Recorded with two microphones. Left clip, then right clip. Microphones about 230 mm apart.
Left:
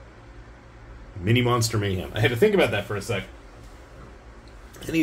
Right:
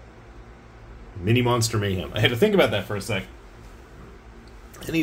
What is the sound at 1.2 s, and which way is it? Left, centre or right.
Speech, centre.